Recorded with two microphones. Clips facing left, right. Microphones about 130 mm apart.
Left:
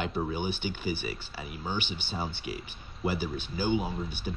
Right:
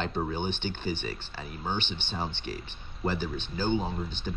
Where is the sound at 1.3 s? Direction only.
45° right (ahead or behind).